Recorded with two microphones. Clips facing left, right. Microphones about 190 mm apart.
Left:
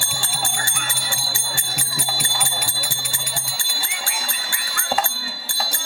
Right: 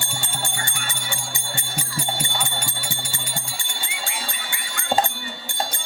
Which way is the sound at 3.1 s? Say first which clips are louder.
Even; 20° right (ahead or behind).